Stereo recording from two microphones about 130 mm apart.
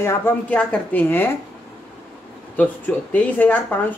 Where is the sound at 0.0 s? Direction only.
20° left (ahead or behind).